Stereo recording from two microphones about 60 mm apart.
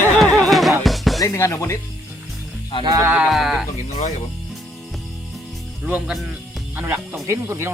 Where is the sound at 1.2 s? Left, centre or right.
Left.